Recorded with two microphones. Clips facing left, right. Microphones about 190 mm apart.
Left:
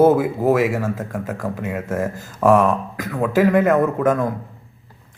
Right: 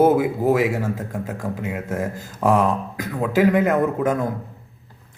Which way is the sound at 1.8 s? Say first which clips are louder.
Left 2 dB; 20° right (ahead or behind).